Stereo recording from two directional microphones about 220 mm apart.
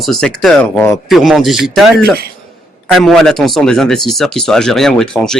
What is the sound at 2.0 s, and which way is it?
Speech, 45° right (ahead or behind).